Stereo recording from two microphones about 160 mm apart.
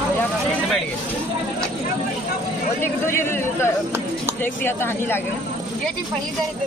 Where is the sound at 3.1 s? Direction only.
15° left (ahead or behind).